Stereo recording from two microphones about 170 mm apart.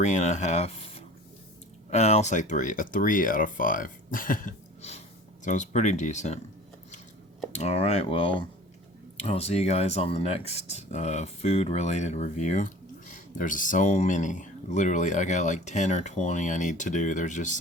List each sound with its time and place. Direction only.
0.0 s speech: 45° left (ahead or behind)
7.5 s speech: 40° left (ahead or behind)